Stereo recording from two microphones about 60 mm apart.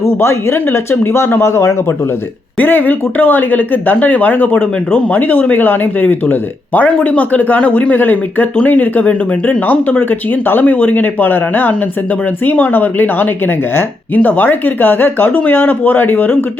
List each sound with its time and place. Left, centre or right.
0.0 s speech: left
2.6 s speech: left